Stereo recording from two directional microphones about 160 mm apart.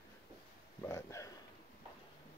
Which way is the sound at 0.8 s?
20° left (ahead or behind).